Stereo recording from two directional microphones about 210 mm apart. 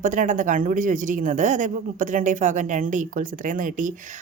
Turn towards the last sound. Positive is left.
turn(degrees=-40)  # may be behind; listen again after turning